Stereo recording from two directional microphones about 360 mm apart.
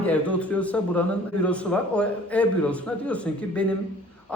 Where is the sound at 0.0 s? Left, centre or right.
Centre.